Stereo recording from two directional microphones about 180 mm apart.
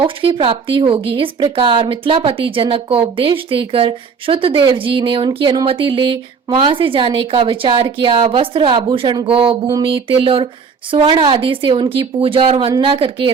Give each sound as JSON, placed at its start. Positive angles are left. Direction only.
{"t": 0.0, "sound": "speech", "side_deg": -30}